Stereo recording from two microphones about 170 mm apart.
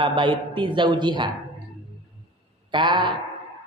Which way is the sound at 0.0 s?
30° right (ahead or behind).